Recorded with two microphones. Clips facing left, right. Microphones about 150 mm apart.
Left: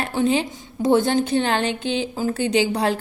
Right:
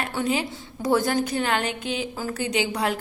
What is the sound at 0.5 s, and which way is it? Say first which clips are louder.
A woman's voice: left 5 dB; 25° left (ahead or behind).